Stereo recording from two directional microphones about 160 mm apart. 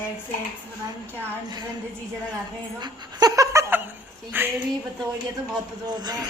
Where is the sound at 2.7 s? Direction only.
25° right (ahead or behind).